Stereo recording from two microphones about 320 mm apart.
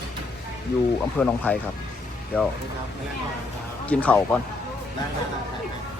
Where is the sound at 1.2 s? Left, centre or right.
Centre.